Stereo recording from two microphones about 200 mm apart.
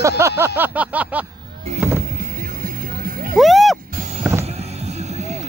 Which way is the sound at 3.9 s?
40° right (ahead or behind).